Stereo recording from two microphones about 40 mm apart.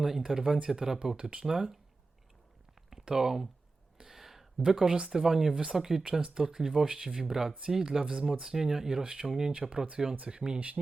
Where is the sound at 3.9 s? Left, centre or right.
Centre.